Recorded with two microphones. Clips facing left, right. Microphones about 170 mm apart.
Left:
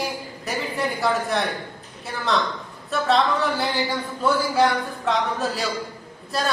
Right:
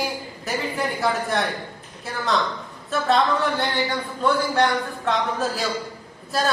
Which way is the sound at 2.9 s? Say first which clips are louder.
Even; centre (ahead or behind).